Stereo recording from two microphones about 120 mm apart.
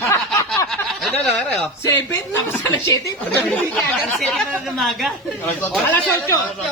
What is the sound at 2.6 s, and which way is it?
Speech, 25° left (ahead or behind).